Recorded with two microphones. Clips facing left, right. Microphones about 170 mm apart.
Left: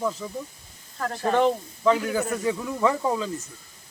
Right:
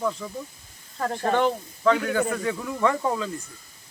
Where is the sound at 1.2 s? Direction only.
Centre (ahead or behind).